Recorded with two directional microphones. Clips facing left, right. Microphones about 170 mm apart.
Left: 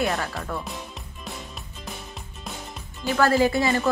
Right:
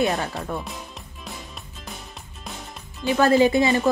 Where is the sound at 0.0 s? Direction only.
20° right (ahead or behind).